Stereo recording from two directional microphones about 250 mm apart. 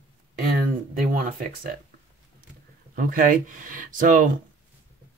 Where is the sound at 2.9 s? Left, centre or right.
Right.